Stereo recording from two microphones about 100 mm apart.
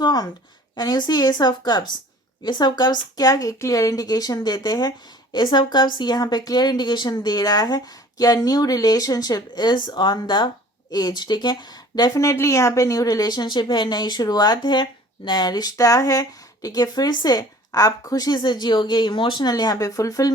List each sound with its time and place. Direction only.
0.0 s speech: 40° left (ahead or behind)